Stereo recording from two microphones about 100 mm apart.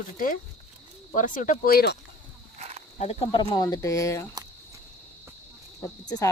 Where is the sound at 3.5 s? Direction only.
40° left (ahead or behind).